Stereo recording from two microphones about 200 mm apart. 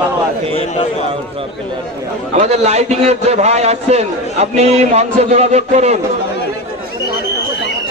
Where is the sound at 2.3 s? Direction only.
35° right (ahead or behind).